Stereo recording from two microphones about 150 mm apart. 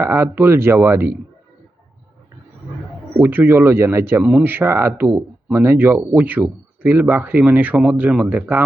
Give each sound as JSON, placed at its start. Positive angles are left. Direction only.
{"t": 0.0, "sound": "speech", "side_deg": -15}
{"t": 3.2, "sound": "speech", "side_deg": -15}